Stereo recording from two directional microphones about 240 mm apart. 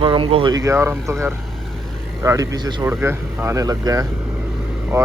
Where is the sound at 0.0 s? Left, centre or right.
Right.